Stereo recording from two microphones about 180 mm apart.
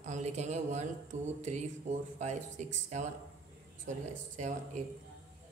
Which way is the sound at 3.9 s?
40° right (ahead or behind).